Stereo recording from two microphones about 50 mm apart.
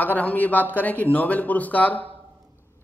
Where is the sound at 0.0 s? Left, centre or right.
Left.